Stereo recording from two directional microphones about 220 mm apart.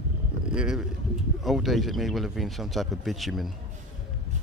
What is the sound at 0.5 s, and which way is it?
Speech, 5° right (ahead or behind).